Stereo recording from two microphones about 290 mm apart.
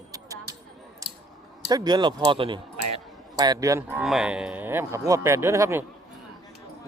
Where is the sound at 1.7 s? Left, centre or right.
Centre.